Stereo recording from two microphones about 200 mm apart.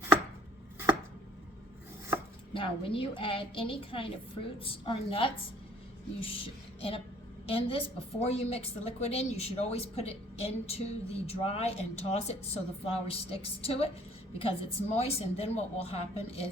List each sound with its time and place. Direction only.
2.5 s a woman's voice: 25° left (ahead or behind)
6.2 s a sound: 30° left (ahead or behind)
7.4 s a woman's voice: 30° left (ahead or behind)